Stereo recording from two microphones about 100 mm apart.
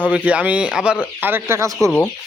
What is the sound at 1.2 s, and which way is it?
Speech, 25° right (ahead or behind).